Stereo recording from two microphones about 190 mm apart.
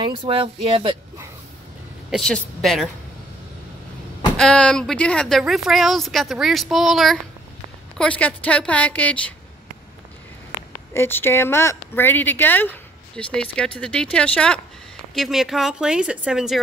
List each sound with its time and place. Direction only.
0.0 s speech: 25° right (ahead or behind)
2.0 s a woman's voice: centre (ahead or behind)
4.4 s a woman's voice: 5° left (ahead or behind)
10.9 s a woman's voice: 10° left (ahead or behind); by 16.5 s 5° right (ahead or behind)